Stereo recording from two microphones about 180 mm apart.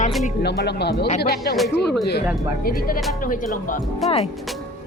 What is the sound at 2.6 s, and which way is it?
Speech, 55° left (ahead or behind).